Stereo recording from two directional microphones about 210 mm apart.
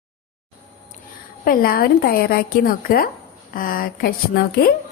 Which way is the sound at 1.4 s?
45° left (ahead or behind).